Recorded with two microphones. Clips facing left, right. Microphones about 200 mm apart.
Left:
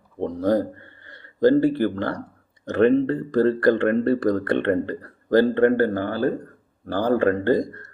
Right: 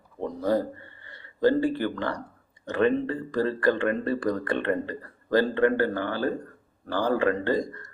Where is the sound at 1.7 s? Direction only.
45° left (ahead or behind).